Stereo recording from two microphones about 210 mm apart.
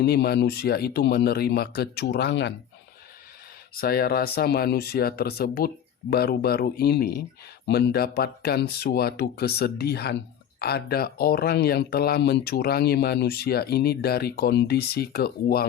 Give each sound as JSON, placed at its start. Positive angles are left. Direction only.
{"t": 0.0, "sound": "speech", "side_deg": 50}
{"t": 3.8, "sound": "speech", "side_deg": 45}